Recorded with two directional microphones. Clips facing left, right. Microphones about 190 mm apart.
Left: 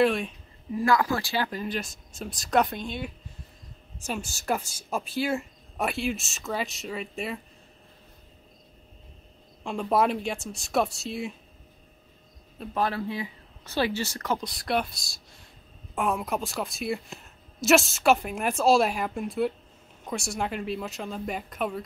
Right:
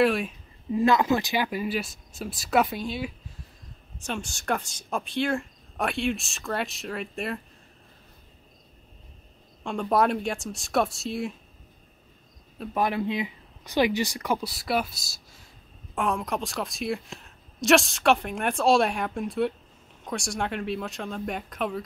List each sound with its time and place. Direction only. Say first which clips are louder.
0.0 s a woman's voice: right 1 dB; centre (ahead or behind)
0.7 s a woman's voice: right 3 dB; 20° right (ahead or behind); by 3.1 s 5° right (ahead or behind)
4.0 s a woman's voice: even; 5° left (ahead or behind)
9.6 s a woman's voice: right 1 dB; centre (ahead or behind)
12.7 s a woman's voice: right 2 dB; 15° right (ahead or behind); by 21.8 s centre (ahead or behind)